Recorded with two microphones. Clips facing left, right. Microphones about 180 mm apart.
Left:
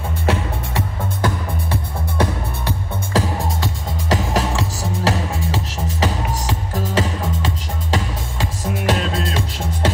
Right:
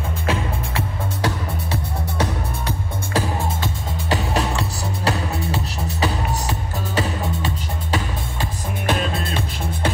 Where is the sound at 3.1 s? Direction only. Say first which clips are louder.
Left 2 dB; 90° left.